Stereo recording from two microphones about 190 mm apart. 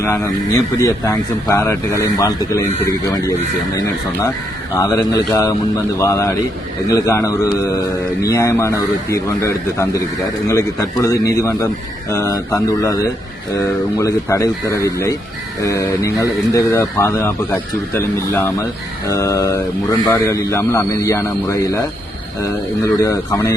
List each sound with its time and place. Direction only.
0.8 s speech: 20° left (ahead or behind)
4.7 s speech: 20° left (ahead or behind)